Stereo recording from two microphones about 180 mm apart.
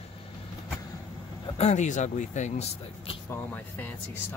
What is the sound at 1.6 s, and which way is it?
Speech, 40° left (ahead or behind).